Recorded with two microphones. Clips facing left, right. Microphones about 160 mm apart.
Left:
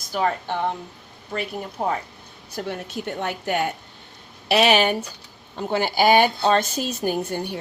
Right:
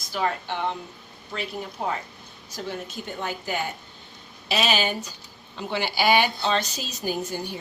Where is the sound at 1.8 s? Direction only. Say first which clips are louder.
Left 4 dB; 50° left (ahead or behind).